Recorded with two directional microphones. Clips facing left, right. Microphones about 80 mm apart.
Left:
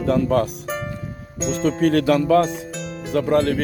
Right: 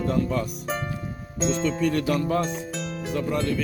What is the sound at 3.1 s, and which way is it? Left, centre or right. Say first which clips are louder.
Speech: left 8 dB; left.